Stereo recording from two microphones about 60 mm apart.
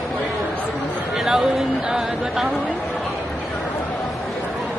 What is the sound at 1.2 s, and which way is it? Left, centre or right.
Speech, centre.